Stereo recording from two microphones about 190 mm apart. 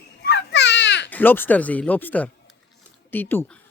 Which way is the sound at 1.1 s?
10° left (ahead or behind).